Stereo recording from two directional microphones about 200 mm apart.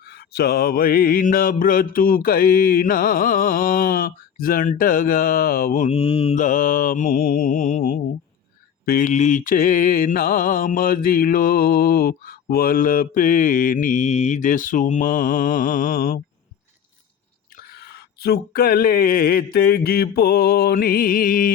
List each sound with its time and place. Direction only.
0.1 s mantra: 50° left (ahead or behind)
17.7 s mantra: 55° left (ahead or behind)